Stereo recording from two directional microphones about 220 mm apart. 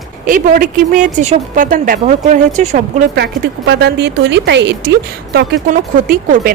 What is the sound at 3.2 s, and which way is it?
A woman's voice, 50° right (ahead or behind).